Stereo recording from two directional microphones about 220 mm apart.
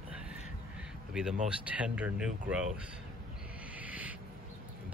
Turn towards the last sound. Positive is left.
turn(degrees=-5)  # may be behind; listen again after turning